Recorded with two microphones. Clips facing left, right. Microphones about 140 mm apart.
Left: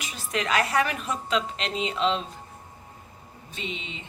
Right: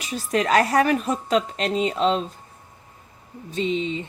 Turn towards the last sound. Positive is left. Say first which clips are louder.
# right 12 dB
turn(degrees=-35)  # may be behind; listen again after turning